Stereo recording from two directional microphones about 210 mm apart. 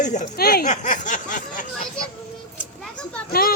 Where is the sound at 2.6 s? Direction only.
Centre (ahead or behind).